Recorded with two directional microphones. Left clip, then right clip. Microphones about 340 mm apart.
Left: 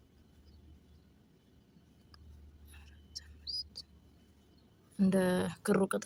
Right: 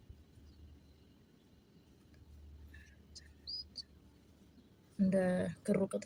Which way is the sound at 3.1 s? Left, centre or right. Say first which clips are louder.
Left 5 dB; left.